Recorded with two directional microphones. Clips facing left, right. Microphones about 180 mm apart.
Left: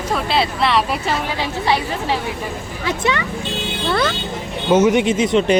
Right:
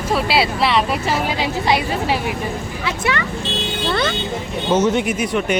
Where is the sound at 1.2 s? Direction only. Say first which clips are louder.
Right 1 dB; 15° right (ahead or behind).